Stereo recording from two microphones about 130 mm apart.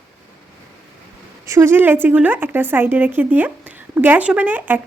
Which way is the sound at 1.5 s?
20° right (ahead or behind).